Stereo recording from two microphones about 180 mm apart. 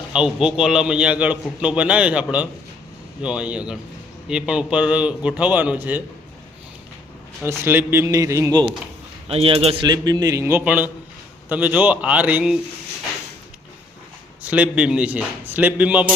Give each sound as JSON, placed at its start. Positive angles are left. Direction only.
{"t": 0.1, "sound": "a man's voice", "side_deg": -5}
{"t": 7.4, "sound": "a man's voice", "side_deg": -10}
{"t": 9.3, "sound": "a man's voice", "side_deg": -35}
{"t": 14.4, "sound": "a man's voice", "side_deg": -5}